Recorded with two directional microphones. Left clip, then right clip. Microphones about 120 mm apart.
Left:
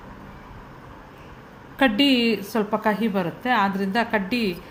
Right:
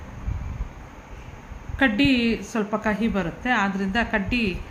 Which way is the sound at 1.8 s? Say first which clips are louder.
Left 1 dB; 15° left (ahead or behind).